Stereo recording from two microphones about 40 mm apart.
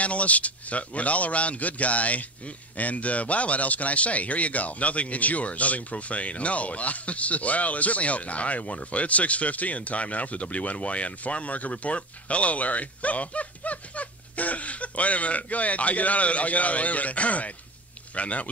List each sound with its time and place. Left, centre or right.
0.0 s a man's voice: left